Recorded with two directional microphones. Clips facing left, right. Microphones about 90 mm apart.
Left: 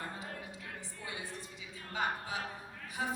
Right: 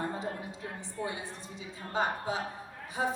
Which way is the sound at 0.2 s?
30° right (ahead or behind).